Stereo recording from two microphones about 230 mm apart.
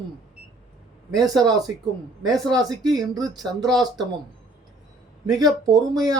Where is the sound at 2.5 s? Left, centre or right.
Centre.